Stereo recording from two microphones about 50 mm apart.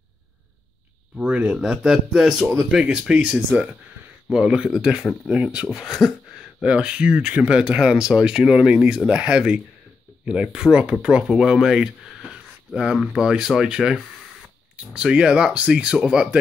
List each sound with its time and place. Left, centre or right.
1.1 s speech: right
3.3 s speech: right
4.3 s speech: centre
5.7 s speech: centre
6.6 s speech: centre